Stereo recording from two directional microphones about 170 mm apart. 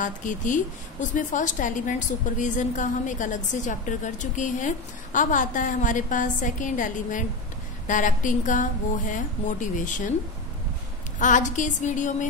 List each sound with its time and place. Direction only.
0.0 s a woman's voice: 50° left (ahead or behind)
11.1 s a woman's voice: 50° left (ahead or behind)